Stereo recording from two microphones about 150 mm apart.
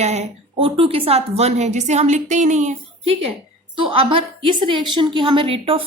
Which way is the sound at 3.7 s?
35° right (ahead or behind).